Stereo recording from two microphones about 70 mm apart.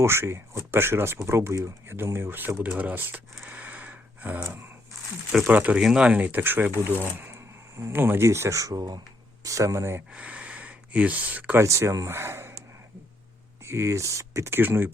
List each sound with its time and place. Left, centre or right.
0.0 s speech: right
2.6 s speech: right
3.4 s a sound: right
5.5 s speech: centre
8.2 s speech: right
10.2 s a sound: centre
11.6 s speech: right
13.7 s speech: right